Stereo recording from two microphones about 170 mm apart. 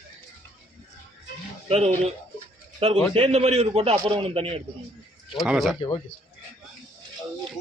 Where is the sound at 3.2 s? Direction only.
35° right (ahead or behind).